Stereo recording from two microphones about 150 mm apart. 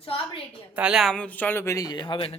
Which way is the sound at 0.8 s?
5° right (ahead or behind).